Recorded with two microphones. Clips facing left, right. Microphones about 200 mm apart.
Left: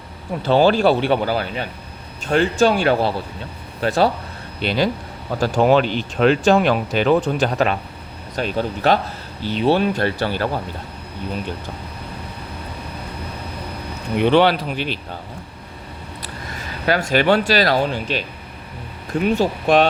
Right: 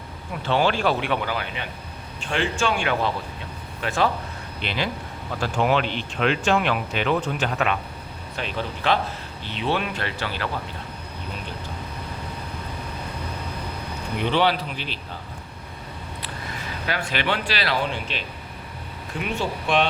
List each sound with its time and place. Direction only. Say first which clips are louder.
0.4 s speech: left 7 dB; 35° left (ahead or behind)
14.3 s speech: left 7 dB; 60° left (ahead or behind)
16.9 s speech: left 10 dB; 45° left (ahead or behind)
19.2 s speech: left 8 dB; 40° left (ahead or behind)